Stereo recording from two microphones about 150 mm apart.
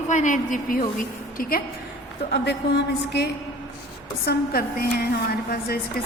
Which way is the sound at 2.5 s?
90° left.